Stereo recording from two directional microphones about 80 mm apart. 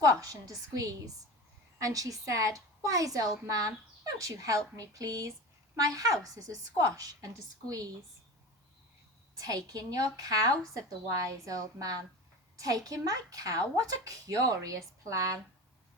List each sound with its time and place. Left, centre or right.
0.0 s a woman's voice: right
9.4 s a woman's voice: right